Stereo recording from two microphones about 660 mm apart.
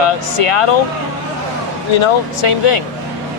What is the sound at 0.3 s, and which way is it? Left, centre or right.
Speech, left.